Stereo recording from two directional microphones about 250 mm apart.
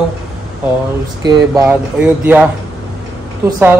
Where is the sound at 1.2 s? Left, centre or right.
Centre.